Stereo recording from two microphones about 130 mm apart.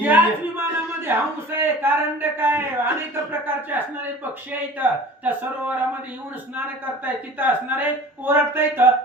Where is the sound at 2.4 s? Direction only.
15° right (ahead or behind).